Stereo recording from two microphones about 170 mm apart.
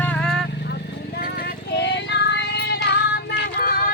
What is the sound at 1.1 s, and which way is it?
Child singing, 60° left (ahead or behind).